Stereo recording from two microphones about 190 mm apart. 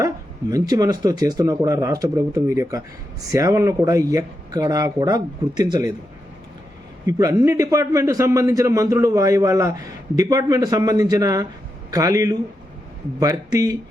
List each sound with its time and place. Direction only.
0.5 s speech: 20° right (ahead or behind)
7.1 s a man's voice: 20° right (ahead or behind)